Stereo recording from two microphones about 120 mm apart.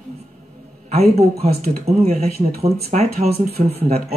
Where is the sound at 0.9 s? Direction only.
60° right (ahead or behind).